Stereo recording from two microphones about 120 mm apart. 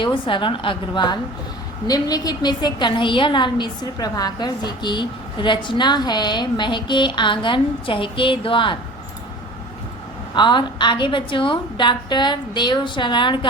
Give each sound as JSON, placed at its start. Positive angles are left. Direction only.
{"t": 0.0, "sound": "a woman's voice", "side_deg": 45}
{"t": 10.3, "sound": "a woman's voice", "side_deg": 40}